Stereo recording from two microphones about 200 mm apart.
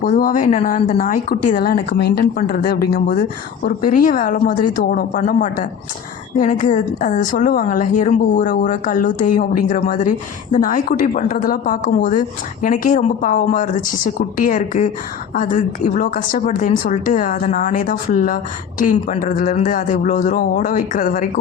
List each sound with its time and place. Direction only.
0.1 s a woman's voice: 40° left (ahead or behind)